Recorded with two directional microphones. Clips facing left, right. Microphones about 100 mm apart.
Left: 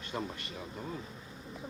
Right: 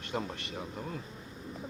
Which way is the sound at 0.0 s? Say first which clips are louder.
Right 2 dB; 60° right (ahead or behind).